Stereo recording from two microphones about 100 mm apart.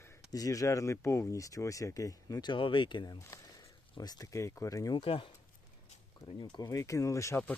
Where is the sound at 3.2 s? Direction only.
35° left (ahead or behind).